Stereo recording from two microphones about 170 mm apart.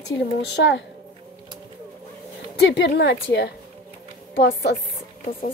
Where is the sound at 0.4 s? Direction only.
90° left.